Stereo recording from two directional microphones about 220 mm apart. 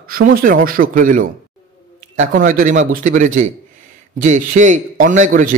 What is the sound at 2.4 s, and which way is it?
A man's voice, 35° right (ahead or behind).